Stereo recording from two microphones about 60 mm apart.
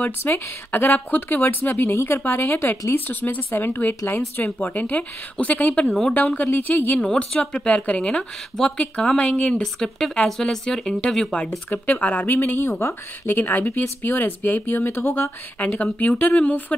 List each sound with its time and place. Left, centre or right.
0.0 s speech: left
5.9 s a woman's voice: centre
6.4 s speech: left
7.1 s speech: centre
11.7 s speech: left
12.5 s speech: left
13.3 s speech: left
15.6 s speech: left